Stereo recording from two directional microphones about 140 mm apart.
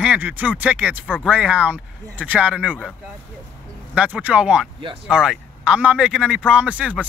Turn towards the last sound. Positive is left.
turn(degrees=-10)  # may be behind; listen again after turning